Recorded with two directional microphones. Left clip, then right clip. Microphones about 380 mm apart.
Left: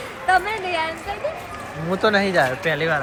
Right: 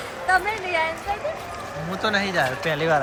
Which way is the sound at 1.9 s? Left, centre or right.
Centre.